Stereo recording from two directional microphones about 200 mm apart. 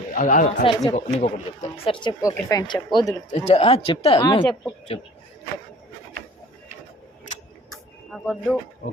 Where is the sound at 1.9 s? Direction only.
20° left (ahead or behind).